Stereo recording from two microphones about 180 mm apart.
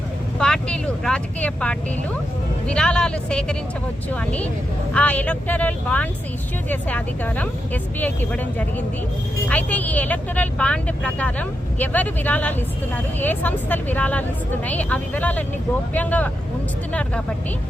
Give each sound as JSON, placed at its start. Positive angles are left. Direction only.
{"t": 0.3, "sound": "speech", "side_deg": 5}